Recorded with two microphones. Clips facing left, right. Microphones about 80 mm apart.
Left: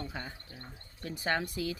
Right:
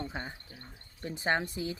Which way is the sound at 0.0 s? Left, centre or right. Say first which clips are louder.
Right 2 dB; right.